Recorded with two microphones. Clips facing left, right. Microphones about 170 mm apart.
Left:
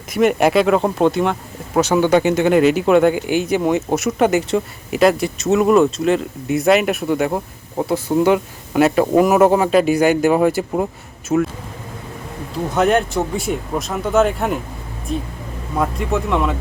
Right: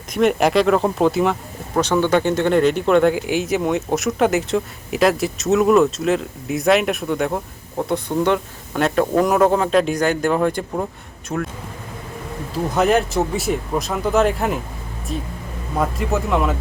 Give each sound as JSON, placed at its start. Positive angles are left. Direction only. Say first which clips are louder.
{"t": 0.1, "sound": "speech", "louder": "left 2 dB", "side_deg": 0}
{"t": 1.7, "sound": "speech", "louder": "left 3 dB", "side_deg": 10}
{"t": 12.6, "sound": "speech", "louder": "left 1 dB", "side_deg": 0}